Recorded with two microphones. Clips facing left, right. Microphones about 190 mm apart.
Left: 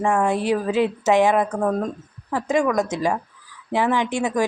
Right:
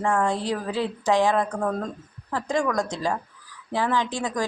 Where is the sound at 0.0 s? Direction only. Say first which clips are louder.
Left 4 dB; 10° left (ahead or behind).